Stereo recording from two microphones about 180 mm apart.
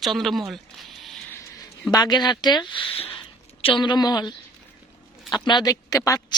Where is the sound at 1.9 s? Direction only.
25° left (ahead or behind).